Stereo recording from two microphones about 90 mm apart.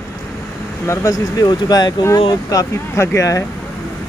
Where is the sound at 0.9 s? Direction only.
35° left (ahead or behind).